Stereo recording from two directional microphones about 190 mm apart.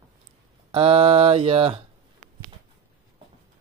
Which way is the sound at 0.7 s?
30° right (ahead or behind).